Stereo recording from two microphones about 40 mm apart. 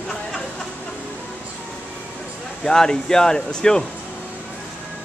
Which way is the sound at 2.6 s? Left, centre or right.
Centre.